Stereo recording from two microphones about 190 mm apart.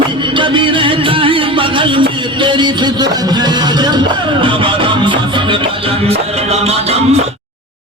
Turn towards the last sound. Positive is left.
turn(degrees=-35)  # may be behind; listen again after turning